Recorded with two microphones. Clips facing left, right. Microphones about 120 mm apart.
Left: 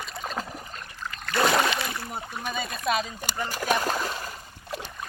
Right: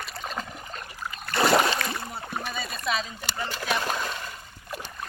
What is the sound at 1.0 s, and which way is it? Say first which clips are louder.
Boat: even; 10° right (ahead or behind).